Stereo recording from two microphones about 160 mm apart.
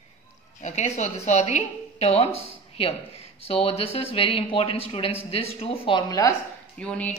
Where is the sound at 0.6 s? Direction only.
45° left (ahead or behind); by 6.3 s 25° left (ahead or behind).